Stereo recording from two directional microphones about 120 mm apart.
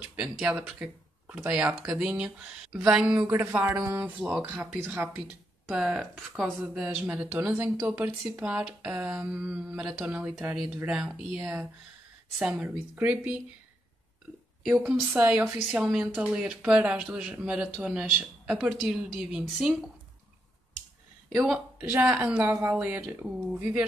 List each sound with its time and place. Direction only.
0.1 s speech: 5° right (ahead or behind)
5.7 s speech: 5° right (ahead or behind)
14.6 s speech: centre (ahead or behind)
21.4 s speech: 5° right (ahead or behind)